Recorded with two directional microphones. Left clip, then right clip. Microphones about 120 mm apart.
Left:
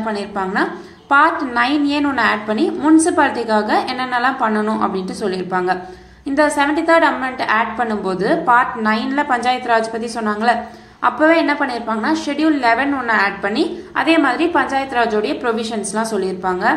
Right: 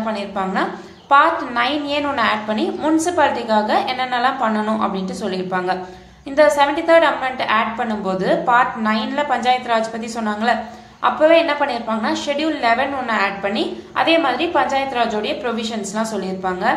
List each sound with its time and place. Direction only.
0.0 s a woman's voice: 25° left (ahead or behind)